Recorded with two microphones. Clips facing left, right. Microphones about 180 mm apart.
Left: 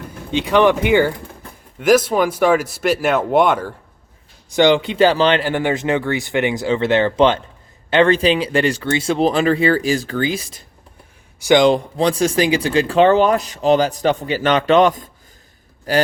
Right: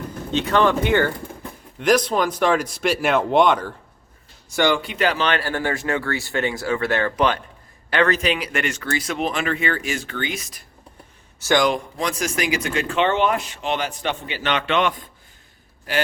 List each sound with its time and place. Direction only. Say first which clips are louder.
0.1 s speech: left 4 dB; 15° left (ahead or behind)
4.5 s speech: left 6 dB; 20° left (ahead or behind)
5.4 s speech: left 5 dB; 15° left (ahead or behind)
11.3 s speech: left 6 dB; 15° left (ahead or behind)
11.7 s speech: left 8 dB; 30° left (ahead or behind)